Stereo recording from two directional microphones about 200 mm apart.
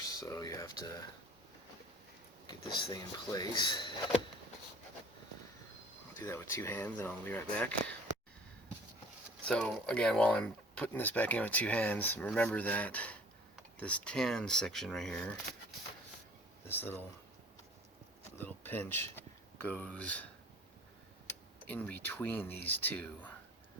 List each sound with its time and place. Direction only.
0.0 s speech: 20° left (ahead or behind)
2.5 s speech: 20° left (ahead or behind)
6.1 s speech: 15° left (ahead or behind)
9.5 s speech: 5° left (ahead or behind)
16.6 s speech: 10° left (ahead or behind)
18.3 s speech: 10° left (ahead or behind)
21.7 s speech: 10° left (ahead or behind)